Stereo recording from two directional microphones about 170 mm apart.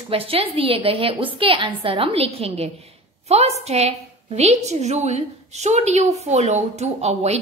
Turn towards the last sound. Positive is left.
turn(degrees=-40)  # may be behind; listen again after turning